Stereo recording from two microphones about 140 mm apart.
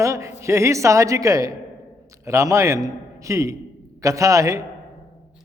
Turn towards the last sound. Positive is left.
turn(degrees=-25)  # may be behind; listen again after turning